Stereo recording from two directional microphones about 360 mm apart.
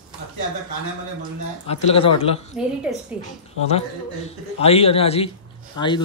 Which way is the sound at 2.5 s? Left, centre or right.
Centre.